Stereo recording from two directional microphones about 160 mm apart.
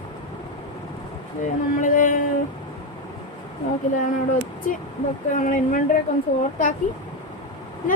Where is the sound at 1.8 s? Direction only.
55° left (ahead or behind).